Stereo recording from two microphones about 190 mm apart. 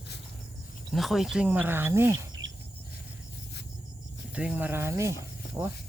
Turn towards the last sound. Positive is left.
turn(degrees=-10)  # may be behind; listen again after turning